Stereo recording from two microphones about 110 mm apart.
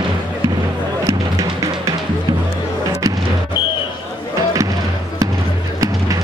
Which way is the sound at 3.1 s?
30° right (ahead or behind).